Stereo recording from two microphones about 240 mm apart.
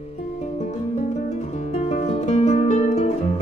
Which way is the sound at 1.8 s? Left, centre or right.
Left.